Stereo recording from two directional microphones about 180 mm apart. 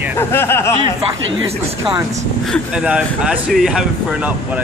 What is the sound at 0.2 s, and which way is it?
Speech, 15° left (ahead or behind).